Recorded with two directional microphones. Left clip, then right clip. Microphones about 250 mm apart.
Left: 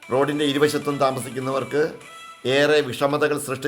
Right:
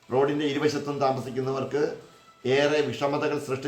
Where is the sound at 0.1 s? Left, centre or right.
Left.